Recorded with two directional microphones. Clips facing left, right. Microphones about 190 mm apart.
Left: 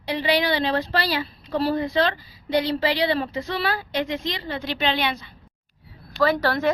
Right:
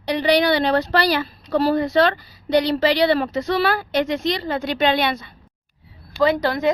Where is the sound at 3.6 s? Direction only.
70° right (ahead or behind).